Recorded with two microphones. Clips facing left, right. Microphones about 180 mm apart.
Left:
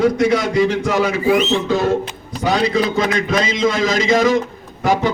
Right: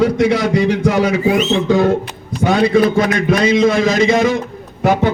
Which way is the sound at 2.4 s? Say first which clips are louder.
Right 5 dB; 50° right (ahead or behind).